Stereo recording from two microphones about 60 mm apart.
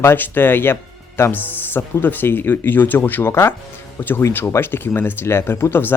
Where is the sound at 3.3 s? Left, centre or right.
Left.